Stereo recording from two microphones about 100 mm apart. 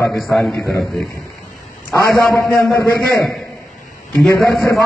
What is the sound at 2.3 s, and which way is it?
Speech, 35° left (ahead or behind).